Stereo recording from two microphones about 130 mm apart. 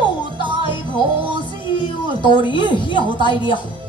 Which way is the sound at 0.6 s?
40° left (ahead or behind).